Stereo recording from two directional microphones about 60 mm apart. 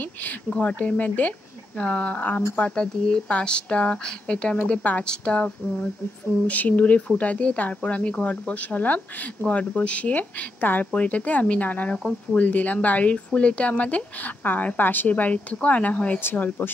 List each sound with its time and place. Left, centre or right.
0.0 s speech: left
5.0 s speech: centre
12.0 s speech: centre
12.4 s speech: left
16.2 s speech: left